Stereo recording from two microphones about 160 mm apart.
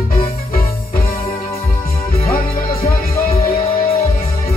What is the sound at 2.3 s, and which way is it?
Music, 65° left (ahead or behind).